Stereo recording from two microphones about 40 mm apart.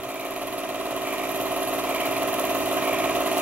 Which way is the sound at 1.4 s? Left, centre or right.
Right.